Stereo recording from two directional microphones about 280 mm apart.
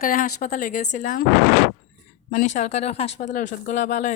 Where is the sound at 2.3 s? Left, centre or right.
Left.